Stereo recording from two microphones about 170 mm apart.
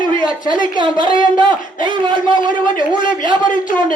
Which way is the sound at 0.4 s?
30° right (ahead or behind).